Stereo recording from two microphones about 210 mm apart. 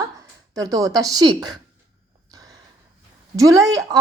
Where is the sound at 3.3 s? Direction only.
15° right (ahead or behind).